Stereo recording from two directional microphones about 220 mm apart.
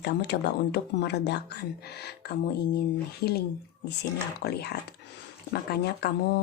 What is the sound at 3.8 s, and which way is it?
Speech, 50° left (ahead or behind).